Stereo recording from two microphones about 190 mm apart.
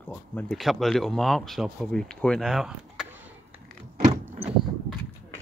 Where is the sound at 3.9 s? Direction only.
35° right (ahead or behind).